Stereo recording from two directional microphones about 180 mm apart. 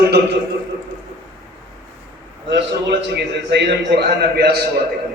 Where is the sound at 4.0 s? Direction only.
65° right (ahead or behind).